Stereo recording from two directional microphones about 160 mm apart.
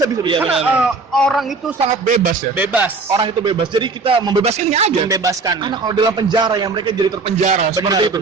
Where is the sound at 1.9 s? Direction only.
50° right (ahead or behind).